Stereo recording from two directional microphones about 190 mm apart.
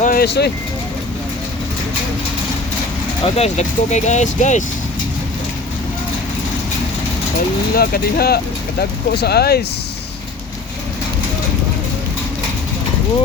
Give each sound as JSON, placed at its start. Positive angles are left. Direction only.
{"t": 0.0, "sound": "vehicle", "side_deg": 50}
{"t": 3.2, "sound": "speech", "side_deg": 35}
{"t": 7.7, "sound": "speech", "side_deg": 55}